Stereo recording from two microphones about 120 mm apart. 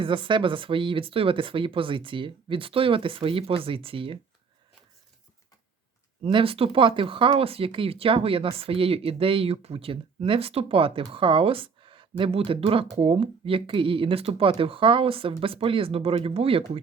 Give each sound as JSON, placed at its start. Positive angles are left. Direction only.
{"t": 0.0, "sound": "speech", "side_deg": -45}
{"t": 6.2, "sound": "speech", "side_deg": -50}